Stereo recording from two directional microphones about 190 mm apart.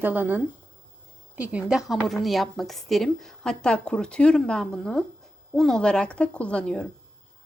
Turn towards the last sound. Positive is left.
turn(degrees=5)  # may be behind; listen again after turning